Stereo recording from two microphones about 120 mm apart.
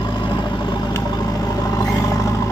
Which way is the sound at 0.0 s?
40° left (ahead or behind).